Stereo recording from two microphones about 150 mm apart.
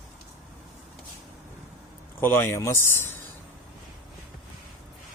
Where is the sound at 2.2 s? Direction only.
15° left (ahead or behind).